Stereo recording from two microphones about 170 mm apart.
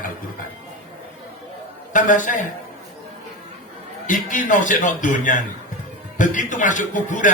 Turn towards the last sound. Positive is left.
turn(degrees=50)  # may be behind; listen again after turning